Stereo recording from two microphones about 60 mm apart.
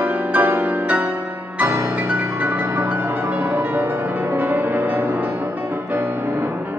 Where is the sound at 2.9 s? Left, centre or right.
Right.